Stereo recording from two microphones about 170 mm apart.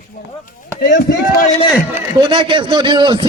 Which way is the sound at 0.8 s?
60° left (ahead or behind).